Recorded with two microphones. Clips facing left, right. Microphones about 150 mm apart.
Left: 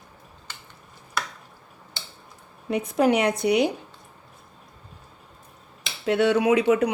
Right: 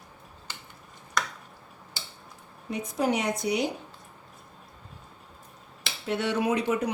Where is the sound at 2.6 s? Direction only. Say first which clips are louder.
Left 6 dB; 65° left (ahead or behind).